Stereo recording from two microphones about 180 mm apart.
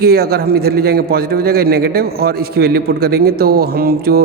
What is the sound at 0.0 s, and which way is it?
A man's voice, 60° right (ahead or behind).